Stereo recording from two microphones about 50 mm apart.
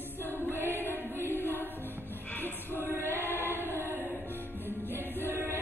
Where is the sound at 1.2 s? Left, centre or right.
Left.